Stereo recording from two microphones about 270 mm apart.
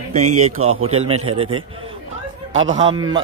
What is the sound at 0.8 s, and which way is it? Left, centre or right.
Speech, right.